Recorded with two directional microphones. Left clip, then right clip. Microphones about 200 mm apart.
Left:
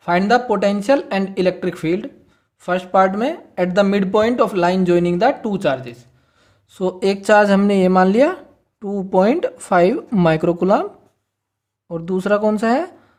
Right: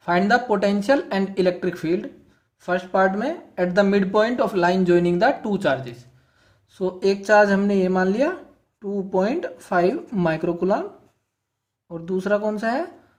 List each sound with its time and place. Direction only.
0.0 s speech: 25° left (ahead or behind)
6.7 s speech: 35° left (ahead or behind)
11.9 s speech: 35° left (ahead or behind)